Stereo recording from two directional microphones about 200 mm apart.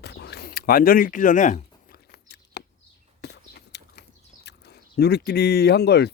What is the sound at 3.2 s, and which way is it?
Biting, 55° left (ahead or behind).